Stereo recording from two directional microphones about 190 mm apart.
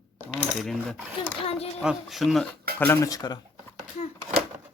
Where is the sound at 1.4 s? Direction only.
30° left (ahead or behind).